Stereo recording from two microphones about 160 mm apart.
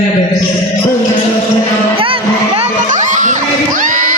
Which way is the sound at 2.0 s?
35° right (ahead or behind).